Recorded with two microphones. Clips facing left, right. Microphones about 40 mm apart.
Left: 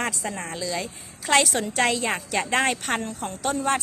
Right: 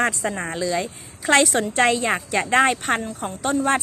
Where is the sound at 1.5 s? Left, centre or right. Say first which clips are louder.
Right 5 dB; right.